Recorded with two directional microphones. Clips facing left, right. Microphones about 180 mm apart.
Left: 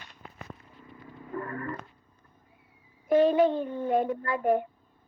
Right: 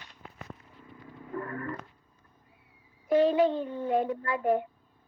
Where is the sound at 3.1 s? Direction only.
50° left (ahead or behind).